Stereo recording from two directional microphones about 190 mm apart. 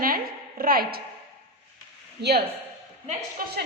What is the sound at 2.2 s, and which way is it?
Speech, 60° right (ahead or behind).